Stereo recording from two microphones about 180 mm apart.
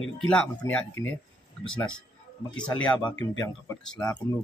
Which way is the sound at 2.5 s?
5° left (ahead or behind).